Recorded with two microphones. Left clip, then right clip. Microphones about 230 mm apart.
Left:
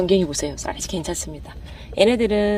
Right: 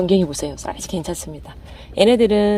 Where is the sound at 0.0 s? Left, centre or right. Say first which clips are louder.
Right 1 dB; right.